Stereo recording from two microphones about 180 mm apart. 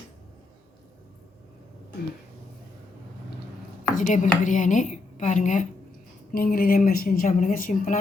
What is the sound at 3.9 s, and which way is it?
A woman's voice, 45° left (ahead or behind).